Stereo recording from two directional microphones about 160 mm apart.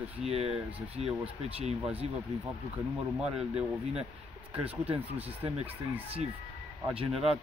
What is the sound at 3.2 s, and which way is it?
Speech, 5° right (ahead or behind).